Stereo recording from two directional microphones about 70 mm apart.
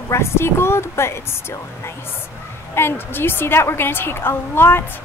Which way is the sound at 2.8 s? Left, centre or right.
Left.